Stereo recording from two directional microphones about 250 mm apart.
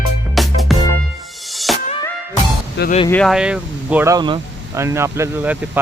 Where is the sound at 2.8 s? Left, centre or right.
Left.